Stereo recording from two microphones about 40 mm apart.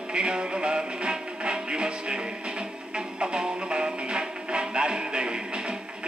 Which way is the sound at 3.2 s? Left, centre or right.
Right.